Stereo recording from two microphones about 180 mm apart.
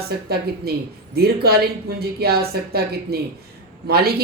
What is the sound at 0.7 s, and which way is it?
Speech, 60° right (ahead or behind).